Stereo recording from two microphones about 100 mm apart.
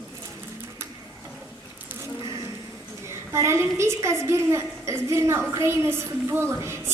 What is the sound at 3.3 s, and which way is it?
A woman's voice, 30° right (ahead or behind).